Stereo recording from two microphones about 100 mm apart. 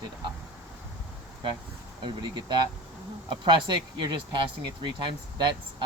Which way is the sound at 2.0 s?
50° right (ahead or behind).